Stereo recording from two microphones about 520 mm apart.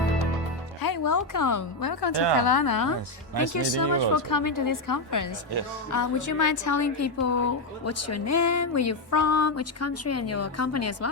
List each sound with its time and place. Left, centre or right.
0.8 s a woman's voice: left